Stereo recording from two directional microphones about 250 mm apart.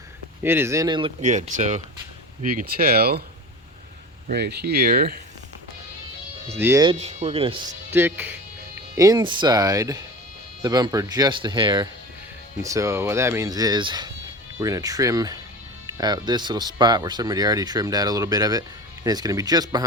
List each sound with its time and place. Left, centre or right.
0.4 s speech: centre; by 3.2 s right
4.3 s speech: right
6.6 s speech: centre
7.0 s speech: right
7.9 s speech: centre